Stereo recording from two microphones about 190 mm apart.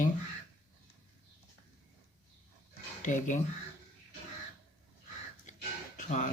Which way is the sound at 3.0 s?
40° left (ahead or behind).